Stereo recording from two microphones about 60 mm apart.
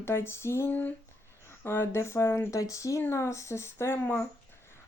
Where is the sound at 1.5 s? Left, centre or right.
Left.